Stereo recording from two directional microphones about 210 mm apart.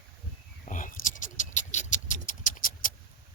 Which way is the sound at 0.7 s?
40° left (ahead or behind).